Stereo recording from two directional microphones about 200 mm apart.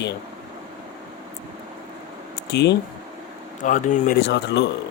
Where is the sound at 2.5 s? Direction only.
60° left (ahead or behind).